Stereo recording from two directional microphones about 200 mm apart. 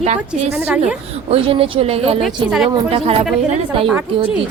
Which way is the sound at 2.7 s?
30° right (ahead or behind).